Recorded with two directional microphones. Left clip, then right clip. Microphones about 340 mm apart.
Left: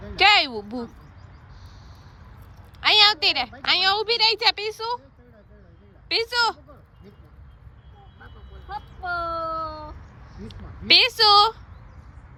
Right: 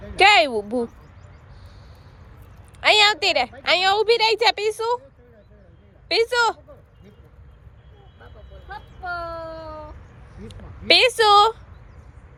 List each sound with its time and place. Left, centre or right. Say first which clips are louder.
0.2 s speech: right 3 dB; centre
2.8 s speech: right 1 dB; centre
6.1 s speech: right 3 dB; centre
9.0 s a sound: left 3 dB; centre
10.8 s speech: right 1 dB; centre